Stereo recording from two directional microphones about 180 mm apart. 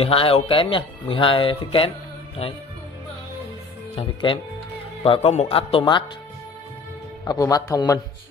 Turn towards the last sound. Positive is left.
turn(degrees=20)  # may be behind; listen again after turning